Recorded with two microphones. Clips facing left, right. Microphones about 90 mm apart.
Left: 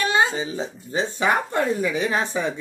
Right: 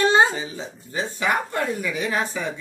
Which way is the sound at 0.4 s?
25° left (ahead or behind).